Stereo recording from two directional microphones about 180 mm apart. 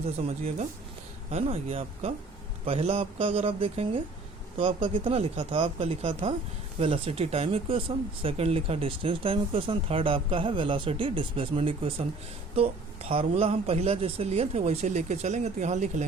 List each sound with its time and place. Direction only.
1.3 s speech: 35° right (ahead or behind)